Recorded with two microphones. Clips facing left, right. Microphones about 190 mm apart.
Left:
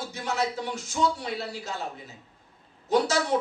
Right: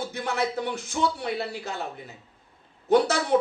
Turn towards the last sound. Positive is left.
turn(degrees=-55)  # may be behind; listen again after turning